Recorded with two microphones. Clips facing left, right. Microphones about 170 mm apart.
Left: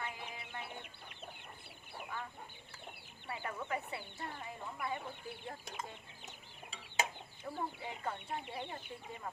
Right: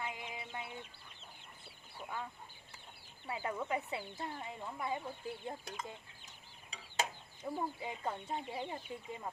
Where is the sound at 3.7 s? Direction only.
20° right (ahead or behind).